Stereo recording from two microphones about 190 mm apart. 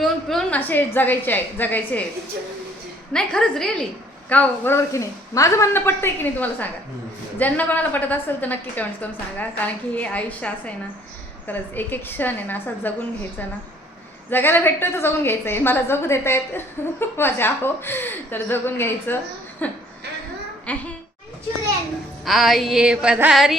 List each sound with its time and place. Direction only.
0.0 s a woman's voice: centre (ahead or behind)
3.1 s music: 5° left (ahead or behind)
4.3 s a woman's voice: 10° left (ahead or behind)
14.3 s a woman's voice: 10° left (ahead or behind)
22.2 s music: centre (ahead or behind)